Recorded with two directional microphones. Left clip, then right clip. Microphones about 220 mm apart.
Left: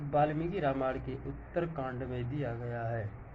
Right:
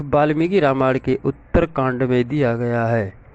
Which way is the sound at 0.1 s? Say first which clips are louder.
Right 14 dB; 50° right (ahead or behind).